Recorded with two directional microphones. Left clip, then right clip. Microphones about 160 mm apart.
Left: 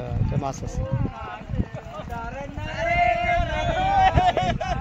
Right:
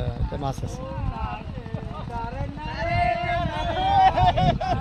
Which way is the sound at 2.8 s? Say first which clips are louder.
Left 3 dB; 60° left (ahead or behind).